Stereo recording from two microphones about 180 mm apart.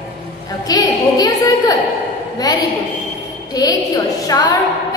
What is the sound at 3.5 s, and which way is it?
Speech, 20° left (ahead or behind).